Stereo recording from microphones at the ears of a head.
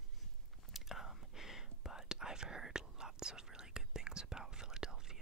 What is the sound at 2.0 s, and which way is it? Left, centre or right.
Whispering, centre.